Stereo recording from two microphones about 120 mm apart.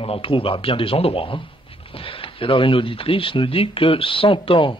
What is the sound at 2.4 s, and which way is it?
Speech, 45° left (ahead or behind).